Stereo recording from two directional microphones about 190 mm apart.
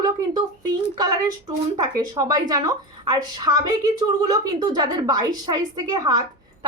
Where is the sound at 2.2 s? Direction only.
20° right (ahead or behind).